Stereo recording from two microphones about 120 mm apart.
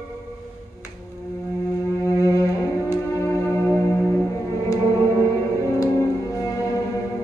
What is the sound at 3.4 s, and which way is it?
Music, 20° left (ahead or behind).